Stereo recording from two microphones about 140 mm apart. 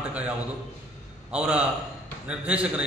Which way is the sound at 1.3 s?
5° right (ahead or behind).